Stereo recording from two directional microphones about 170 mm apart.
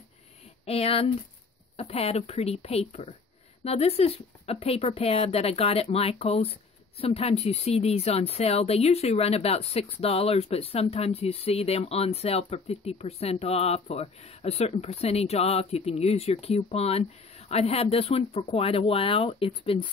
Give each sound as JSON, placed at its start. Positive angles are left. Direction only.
{"t": 0.7, "sound": "a woman's voice", "side_deg": 35}